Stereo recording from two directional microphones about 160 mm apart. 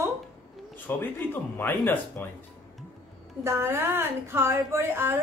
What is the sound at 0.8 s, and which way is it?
Speech, 10° left (ahead or behind).